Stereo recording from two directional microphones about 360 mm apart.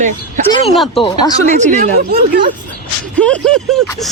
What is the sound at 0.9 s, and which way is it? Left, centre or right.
Speech, centre.